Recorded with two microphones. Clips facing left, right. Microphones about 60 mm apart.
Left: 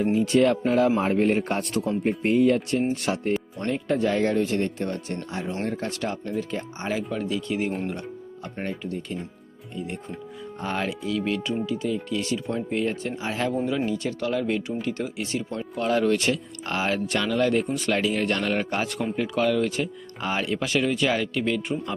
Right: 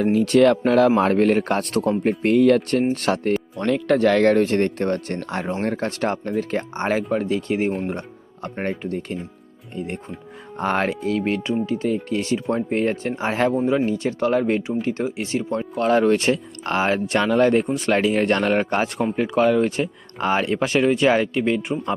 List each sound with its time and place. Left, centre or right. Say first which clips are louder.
0.0 s speech: right 5 dB; right
1.7 s speech: right 4 dB; right